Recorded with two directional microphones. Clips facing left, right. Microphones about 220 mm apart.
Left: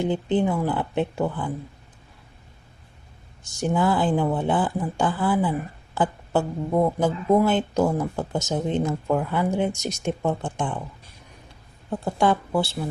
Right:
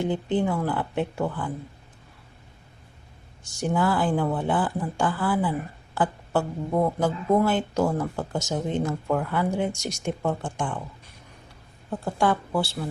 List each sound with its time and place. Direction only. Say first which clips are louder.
0.1 s speech: left 2 dB; 20° left (ahead or behind)
3.6 s speech: left 2 dB; 20° left (ahead or behind)
12.1 s speech: left 2 dB; 20° left (ahead or behind)